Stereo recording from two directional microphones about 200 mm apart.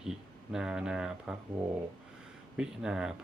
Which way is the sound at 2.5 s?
5° right (ahead or behind).